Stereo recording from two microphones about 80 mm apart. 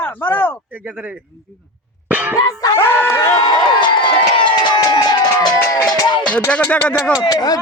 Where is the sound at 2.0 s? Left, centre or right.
Right.